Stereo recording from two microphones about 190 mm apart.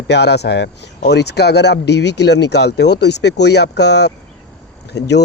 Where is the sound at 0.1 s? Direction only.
60° left (ahead or behind).